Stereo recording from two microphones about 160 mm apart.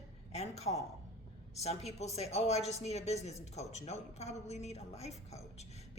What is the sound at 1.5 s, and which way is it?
A woman's voice, 40° left (ahead or behind).